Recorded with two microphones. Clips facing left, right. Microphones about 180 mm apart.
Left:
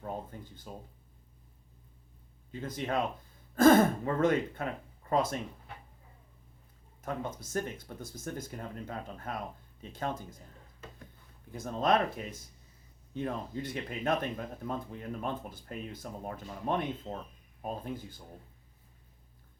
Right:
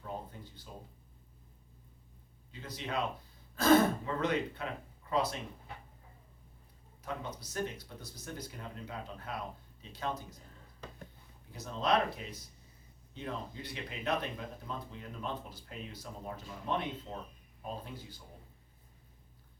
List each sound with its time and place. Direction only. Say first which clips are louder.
0.0 s a sound: left 3 dB; 50° left (ahead or behind)
2.5 s speech: left 6 dB; 50° left (ahead or behind)
7.0 s speech: left 4 dB; 50° left (ahead or behind)
11.5 s speech: left 3 dB; 50° left (ahead or behind)